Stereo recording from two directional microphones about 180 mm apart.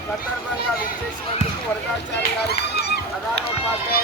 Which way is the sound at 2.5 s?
65° left (ahead or behind).